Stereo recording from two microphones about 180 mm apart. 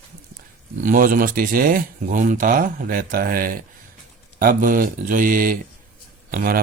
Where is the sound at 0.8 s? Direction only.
50° right (ahead or behind).